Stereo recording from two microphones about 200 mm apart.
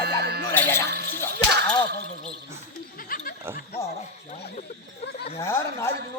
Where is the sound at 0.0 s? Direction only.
55° right (ahead or behind).